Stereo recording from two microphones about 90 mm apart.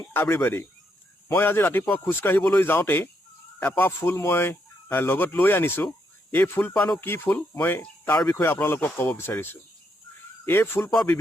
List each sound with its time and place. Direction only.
0.1 s speech: 25° left (ahead or behind)